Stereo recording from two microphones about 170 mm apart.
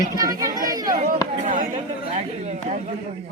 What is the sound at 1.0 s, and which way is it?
Speech, 45° right (ahead or behind).